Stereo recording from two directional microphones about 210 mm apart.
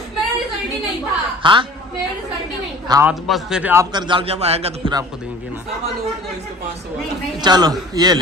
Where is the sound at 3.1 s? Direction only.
Centre (ahead or behind).